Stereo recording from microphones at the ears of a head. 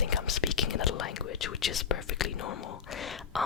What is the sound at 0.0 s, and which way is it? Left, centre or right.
Whispering, left.